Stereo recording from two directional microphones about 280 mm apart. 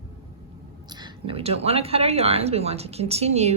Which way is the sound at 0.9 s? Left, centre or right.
Centre.